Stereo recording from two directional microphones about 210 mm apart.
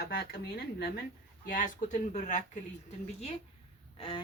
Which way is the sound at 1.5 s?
40° left (ahead or behind).